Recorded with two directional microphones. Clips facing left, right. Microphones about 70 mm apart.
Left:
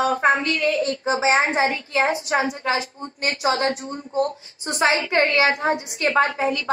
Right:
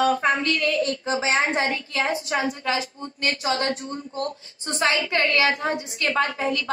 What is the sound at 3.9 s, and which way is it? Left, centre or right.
Speech, centre.